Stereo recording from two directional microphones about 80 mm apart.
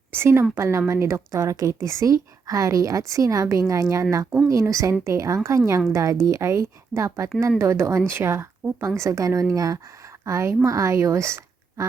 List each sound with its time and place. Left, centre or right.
0.1 s a woman's voice: right